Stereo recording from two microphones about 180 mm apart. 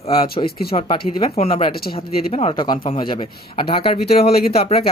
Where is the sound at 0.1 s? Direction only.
30° left (ahead or behind).